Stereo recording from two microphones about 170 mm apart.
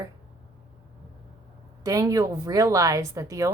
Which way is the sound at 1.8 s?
20° right (ahead or behind).